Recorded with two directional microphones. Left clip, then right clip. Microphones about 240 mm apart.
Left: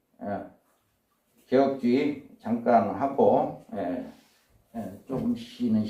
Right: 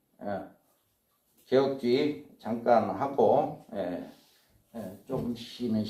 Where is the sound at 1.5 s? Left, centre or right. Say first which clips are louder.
Left 2 dB; right.